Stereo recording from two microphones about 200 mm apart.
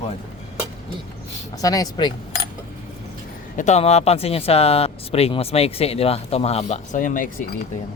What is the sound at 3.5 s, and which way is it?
Speech, 35° left (ahead or behind).